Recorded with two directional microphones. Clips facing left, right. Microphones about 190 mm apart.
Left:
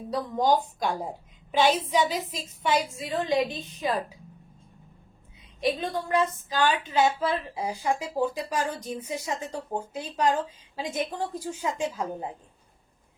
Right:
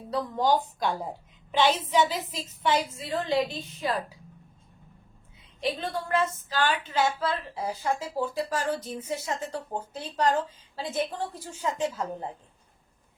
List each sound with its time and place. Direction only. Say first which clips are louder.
0.3 s a woman's voice: left 2 dB; 15° left (ahead or behind)
5.5 s a woman's voice: left 3 dB; 15° left (ahead or behind)